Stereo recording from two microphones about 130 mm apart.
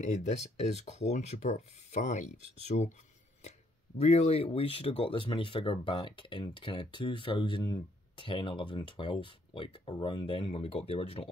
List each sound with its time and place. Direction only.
0.0 s speech: 65° left (ahead or behind)
4.0 s speech: 55° left (ahead or behind)